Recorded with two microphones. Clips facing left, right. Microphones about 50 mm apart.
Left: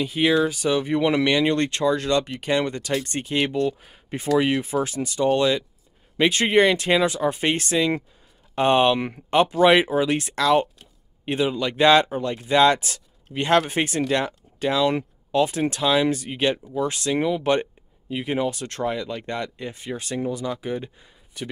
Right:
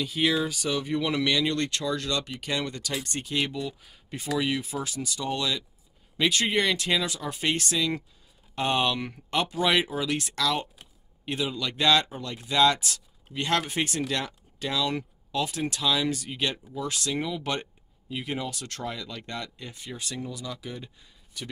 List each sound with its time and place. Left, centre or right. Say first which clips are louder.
0.0 s speech: left 6 dB; left